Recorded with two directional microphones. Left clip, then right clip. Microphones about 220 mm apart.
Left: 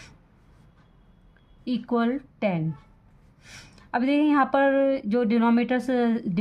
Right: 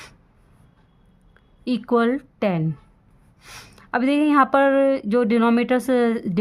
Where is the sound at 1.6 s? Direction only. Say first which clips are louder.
Right 6 dB; 40° right (ahead or behind).